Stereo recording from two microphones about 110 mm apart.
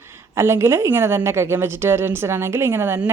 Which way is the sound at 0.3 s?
25° right (ahead or behind).